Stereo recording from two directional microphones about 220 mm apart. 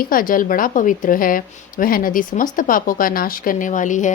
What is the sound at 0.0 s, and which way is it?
A woman's voice, 40° left (ahead or behind).